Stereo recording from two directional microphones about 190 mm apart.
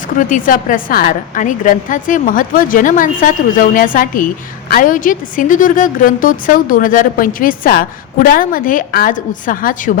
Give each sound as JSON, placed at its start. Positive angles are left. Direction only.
{"t": 0.2, "sound": "a woman's voice", "side_deg": 45}